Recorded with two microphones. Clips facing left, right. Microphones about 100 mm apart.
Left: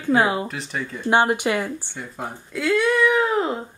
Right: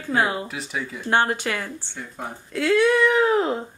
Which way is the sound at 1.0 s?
15° left (ahead or behind).